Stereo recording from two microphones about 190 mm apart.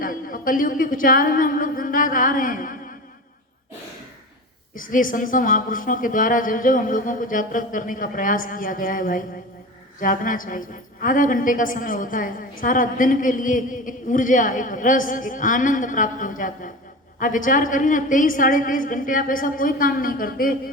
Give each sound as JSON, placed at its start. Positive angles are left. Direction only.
{"t": 0.0, "sound": "a woman's voice", "side_deg": 45}
{"t": 4.7, "sound": "a woman's voice", "side_deg": 45}